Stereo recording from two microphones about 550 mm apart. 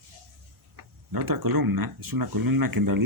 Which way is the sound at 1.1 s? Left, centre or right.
Right.